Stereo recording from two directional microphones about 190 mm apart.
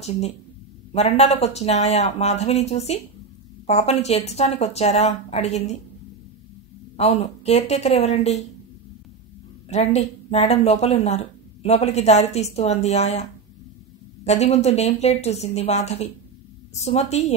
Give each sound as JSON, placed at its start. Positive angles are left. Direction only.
{"t": 0.9, "sound": "speech", "side_deg": 35}
{"t": 7.0, "sound": "speech", "side_deg": 35}
{"t": 9.7, "sound": "speech", "side_deg": 35}